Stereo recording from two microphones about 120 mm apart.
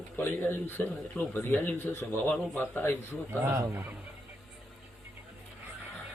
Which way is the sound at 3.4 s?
25° right (ahead or behind).